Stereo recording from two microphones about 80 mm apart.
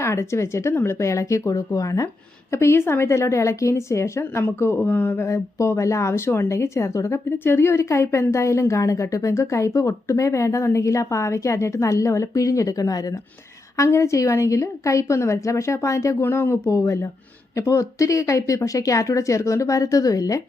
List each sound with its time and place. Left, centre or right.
0.0 s a woman's voice: left
2.5 s a woman's voice: left
13.7 s a woman's voice: left
16.2 s a woman's voice: left